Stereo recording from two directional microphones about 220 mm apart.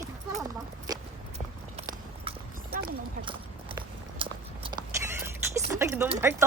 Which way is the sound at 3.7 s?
20° right (ahead or behind).